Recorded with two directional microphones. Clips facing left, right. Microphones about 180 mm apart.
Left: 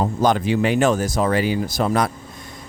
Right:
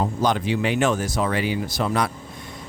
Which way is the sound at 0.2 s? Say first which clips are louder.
Left 5 dB; 45° left (ahead or behind).